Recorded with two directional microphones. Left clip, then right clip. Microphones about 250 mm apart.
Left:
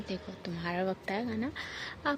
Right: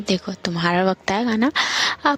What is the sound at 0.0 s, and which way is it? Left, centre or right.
Speech, right.